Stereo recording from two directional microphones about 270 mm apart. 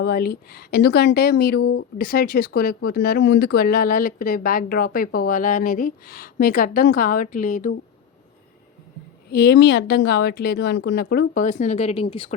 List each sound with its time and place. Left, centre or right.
0.0 s speech: left
9.3 s speech: left